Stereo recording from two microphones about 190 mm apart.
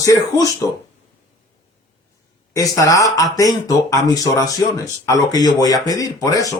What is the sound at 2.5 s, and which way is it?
Speech, 20° left (ahead or behind).